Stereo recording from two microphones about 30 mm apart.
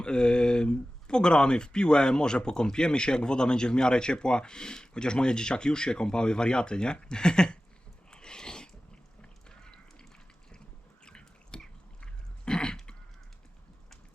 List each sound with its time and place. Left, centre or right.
0.0 s speech: left
8.1 s a sound: left
11.0 s chewing: left
12.5 s throat clearing: left